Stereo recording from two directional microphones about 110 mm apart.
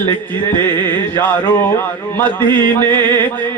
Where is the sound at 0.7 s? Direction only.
20° left (ahead or behind).